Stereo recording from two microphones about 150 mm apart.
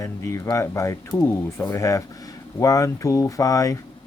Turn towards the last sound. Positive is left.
turn(degrees=20)  # may be behind; listen again after turning